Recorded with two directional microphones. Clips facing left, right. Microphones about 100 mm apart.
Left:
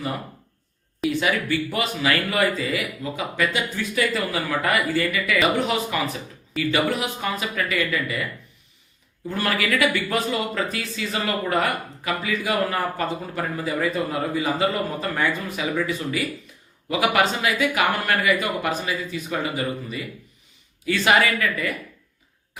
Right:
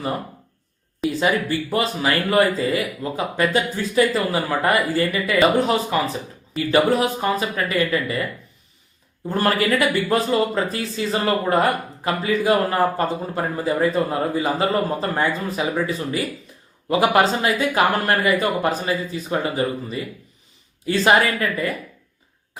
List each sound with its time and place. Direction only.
1.1 s speech: 30° right (ahead or behind)
9.3 s speech: 35° right (ahead or behind)